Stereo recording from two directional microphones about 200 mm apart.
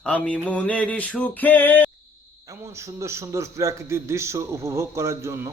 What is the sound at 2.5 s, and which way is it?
A man's voice, 15° right (ahead or behind).